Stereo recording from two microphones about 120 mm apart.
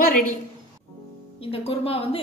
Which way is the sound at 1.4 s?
50° left (ahead or behind).